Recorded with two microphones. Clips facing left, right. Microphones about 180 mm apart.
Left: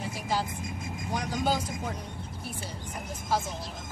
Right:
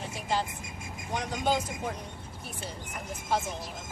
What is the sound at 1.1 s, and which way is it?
Speech, 5° left (ahead or behind).